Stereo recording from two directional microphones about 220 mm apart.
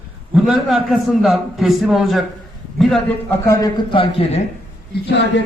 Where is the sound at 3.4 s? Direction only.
15° left (ahead or behind).